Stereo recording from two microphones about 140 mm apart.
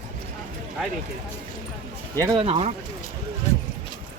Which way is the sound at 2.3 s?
45° right (ahead or behind).